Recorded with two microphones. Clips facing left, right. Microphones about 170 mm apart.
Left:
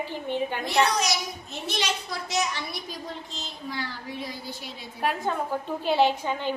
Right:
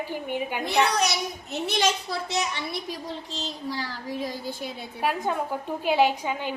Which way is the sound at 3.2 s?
35° right (ahead or behind).